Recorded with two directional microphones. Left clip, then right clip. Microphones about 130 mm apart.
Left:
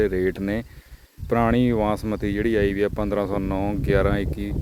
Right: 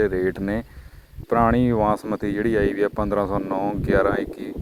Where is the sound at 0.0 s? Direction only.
15° left (ahead or behind).